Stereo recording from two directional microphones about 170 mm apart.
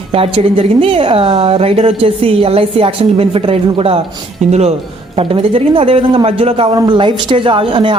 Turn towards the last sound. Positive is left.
turn(degrees=-30)  # may be behind; listen again after turning